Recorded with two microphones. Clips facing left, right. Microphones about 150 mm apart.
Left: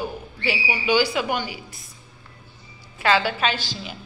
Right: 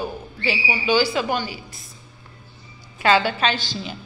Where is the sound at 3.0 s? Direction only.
5° left (ahead or behind).